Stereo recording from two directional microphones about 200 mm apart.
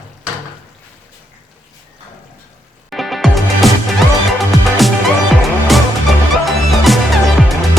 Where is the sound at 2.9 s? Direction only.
Centre (ahead or behind).